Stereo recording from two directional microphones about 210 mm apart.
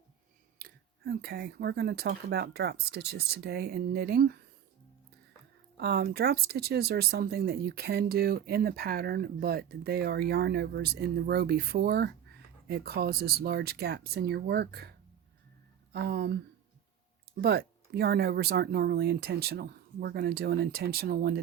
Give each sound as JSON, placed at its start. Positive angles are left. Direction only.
{"t": 0.6, "sound": "speech", "side_deg": -45}
{"t": 5.7, "sound": "speech", "side_deg": -50}
{"t": 15.9, "sound": "speech", "side_deg": -50}
{"t": 17.4, "sound": "speech", "side_deg": -50}